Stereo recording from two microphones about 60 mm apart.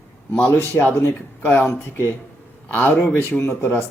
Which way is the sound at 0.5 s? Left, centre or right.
Left.